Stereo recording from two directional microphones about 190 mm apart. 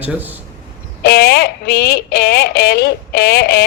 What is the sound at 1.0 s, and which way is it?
Speech, 60° left (ahead or behind).